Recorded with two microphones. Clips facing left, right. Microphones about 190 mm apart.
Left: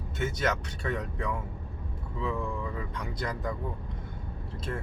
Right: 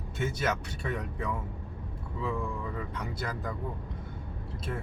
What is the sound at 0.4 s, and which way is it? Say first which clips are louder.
Speech: left 1 dB; 5° right (ahead or behind).